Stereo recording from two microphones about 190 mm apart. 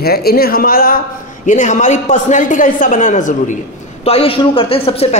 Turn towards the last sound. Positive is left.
turn(degrees=30)  # may be behind; listen again after turning